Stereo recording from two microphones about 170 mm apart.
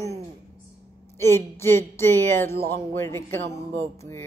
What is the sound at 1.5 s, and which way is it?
Speech, 15° left (ahead or behind).